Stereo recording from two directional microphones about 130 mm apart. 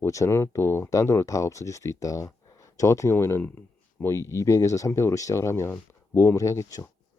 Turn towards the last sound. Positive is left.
turn(degrees=25)  # may be behind; listen again after turning